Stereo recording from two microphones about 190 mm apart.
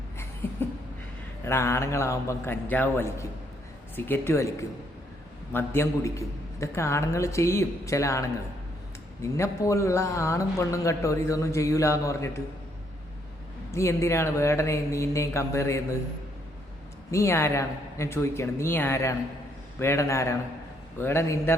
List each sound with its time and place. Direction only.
1.5 s a man's voice: 15° left (ahead or behind)
13.7 s a man's voice: 15° left (ahead or behind)
17.1 s a man's voice: 15° left (ahead or behind)